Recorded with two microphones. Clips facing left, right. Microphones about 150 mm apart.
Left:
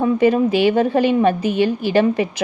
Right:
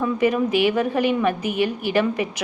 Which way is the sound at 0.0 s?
30° left (ahead or behind).